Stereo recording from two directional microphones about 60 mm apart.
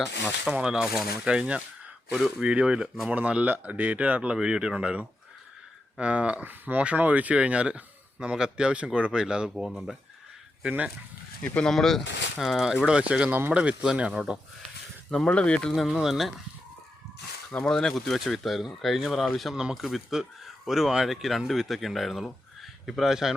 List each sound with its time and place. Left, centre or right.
0.4 s speech: centre
6.4 s speech: right; by 9.5 s centre
9.6 s speech: centre
10.6 s speech: right
11.4 s speech: left
11.7 s speech: centre
15.1 s speech: centre
15.8 s speech: centre
17.5 s speech: centre